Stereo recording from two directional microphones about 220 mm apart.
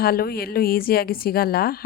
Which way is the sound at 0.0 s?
45° left (ahead or behind).